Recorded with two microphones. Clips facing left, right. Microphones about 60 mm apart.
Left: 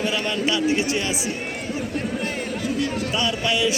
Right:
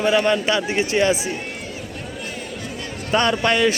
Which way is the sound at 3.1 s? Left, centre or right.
Right.